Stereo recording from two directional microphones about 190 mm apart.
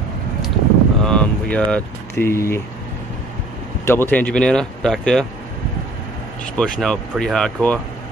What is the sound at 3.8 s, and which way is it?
Speech, 10° left (ahead or behind).